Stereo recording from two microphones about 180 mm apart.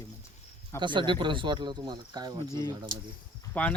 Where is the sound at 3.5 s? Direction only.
10° left (ahead or behind).